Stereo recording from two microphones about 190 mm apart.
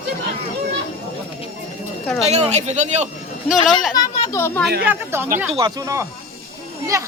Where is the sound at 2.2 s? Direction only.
35° right (ahead or behind).